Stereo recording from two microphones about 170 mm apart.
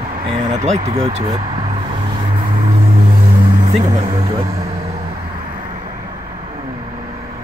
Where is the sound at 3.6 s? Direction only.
45° right (ahead or behind).